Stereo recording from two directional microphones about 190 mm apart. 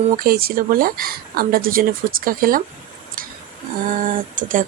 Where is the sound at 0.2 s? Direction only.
50° right (ahead or behind).